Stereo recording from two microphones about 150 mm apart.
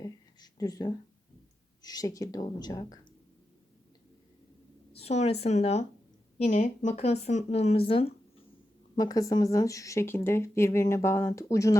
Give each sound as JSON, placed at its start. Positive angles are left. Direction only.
{"t": 0.0, "sound": "a sound", "side_deg": 25}
{"t": 1.8, "sound": "speech", "side_deg": 25}
{"t": 4.9, "sound": "a woman's voice", "side_deg": 45}
{"t": 9.0, "sound": "speech", "side_deg": 25}